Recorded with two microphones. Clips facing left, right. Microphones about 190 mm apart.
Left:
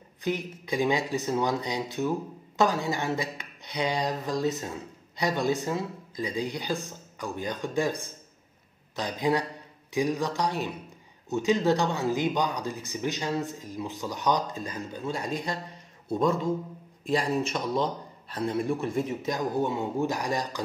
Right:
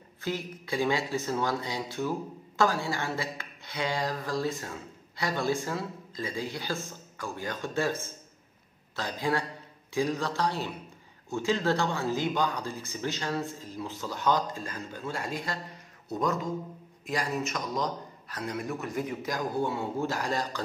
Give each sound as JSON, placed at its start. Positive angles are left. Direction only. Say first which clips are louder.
{"t": 0.2, "sound": "a man's voice", "louder": "left 3 dB", "side_deg": 15}